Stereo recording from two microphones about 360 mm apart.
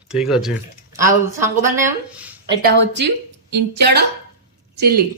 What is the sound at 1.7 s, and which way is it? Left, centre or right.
Speech, centre.